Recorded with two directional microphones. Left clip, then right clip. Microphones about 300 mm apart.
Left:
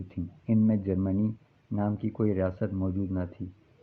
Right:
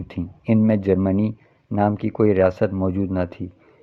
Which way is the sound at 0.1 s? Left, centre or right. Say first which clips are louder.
Right 9 dB; right.